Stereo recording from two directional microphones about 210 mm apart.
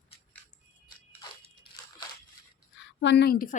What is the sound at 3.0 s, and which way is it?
Speech, 55° left (ahead or behind).